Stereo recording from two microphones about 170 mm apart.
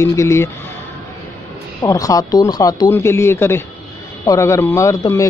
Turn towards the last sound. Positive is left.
turn(degrees=20)  # may be behind; listen again after turning